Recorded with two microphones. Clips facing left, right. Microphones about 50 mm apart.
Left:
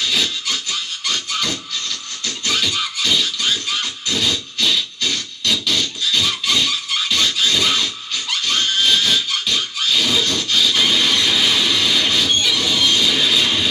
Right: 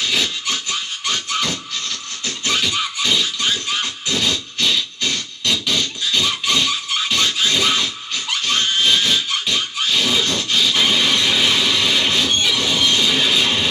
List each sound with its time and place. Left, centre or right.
0.0 s wood: right
2.2 s music: centre
4.1 s music: centre
5.9 s a sound: right
6.7 s music: centre